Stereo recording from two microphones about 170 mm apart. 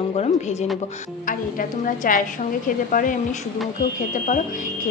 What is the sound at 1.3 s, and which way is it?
A woman's voice, 55° left (ahead or behind).